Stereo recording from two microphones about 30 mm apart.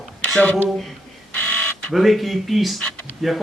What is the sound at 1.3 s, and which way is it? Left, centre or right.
Printer, left.